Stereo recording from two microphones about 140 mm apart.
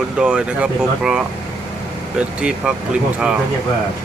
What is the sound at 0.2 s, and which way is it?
Speech, 5° right (ahead or behind).